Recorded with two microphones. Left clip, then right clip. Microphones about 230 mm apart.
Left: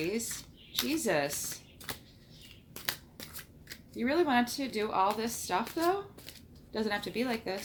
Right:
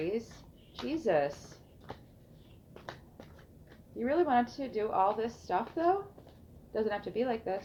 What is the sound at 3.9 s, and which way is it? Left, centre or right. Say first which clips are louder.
Speech: even; left.